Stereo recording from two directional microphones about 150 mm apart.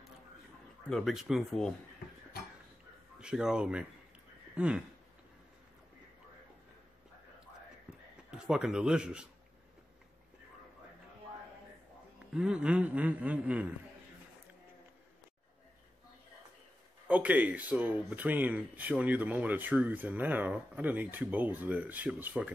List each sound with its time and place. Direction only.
0.8 s speech: centre (ahead or behind)
3.2 s speech: 5° right (ahead or behind)
8.3 s speech: 5° right (ahead or behind)
12.4 s speech: 5° right (ahead or behind)
17.1 s speech: 10° right (ahead or behind)